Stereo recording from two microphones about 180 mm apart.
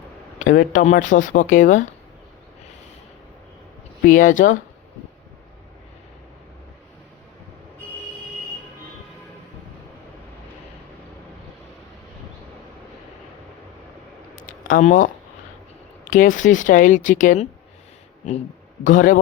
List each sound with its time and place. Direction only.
0.3 s speech: 50° left (ahead or behind)
4.0 s speech: 50° left (ahead or behind)
14.7 s speech: 45° left (ahead or behind)
18.9 s speech: 45° left (ahead or behind)